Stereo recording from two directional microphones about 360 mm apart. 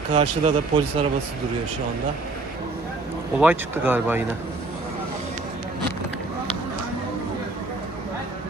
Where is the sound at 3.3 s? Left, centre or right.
Centre.